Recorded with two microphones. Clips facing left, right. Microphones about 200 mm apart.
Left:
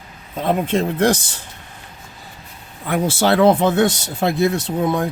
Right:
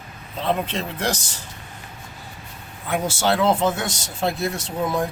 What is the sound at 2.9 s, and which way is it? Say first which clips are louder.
Speech: left 5 dB; 60° left (ahead or behind).